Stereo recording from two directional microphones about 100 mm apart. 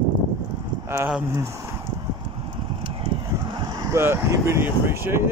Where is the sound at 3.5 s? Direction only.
45° right (ahead or behind).